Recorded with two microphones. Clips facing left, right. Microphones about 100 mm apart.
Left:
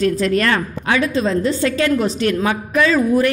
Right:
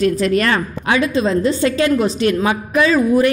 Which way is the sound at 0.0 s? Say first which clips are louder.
Right 1 dB; 10° right (ahead or behind).